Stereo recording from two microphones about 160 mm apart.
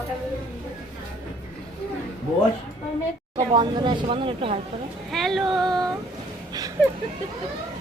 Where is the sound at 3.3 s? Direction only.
25° right (ahead or behind).